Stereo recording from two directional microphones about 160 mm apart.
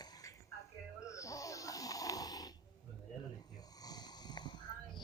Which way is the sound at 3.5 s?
25° left (ahead or behind).